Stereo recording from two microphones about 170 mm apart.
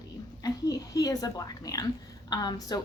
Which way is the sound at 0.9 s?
20° left (ahead or behind).